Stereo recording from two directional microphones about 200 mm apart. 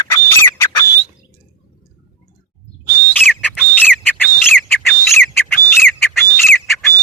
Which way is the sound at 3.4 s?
5° left (ahead or behind).